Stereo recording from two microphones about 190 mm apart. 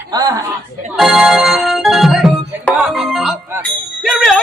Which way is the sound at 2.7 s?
Centre (ahead or behind).